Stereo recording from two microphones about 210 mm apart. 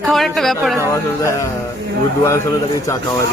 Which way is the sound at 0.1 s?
Centre (ahead or behind).